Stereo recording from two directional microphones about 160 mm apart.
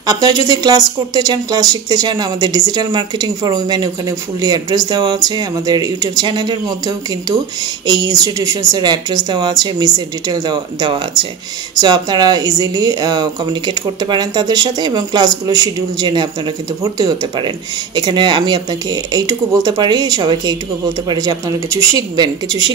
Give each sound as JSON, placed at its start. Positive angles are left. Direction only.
{"t": 0.0, "sound": "a woman's voice", "side_deg": -25}